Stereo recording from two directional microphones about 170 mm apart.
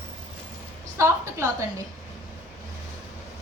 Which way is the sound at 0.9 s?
15° right (ahead or behind).